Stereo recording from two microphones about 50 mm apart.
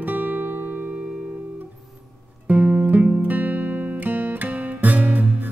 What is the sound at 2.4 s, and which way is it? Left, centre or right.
Music, right.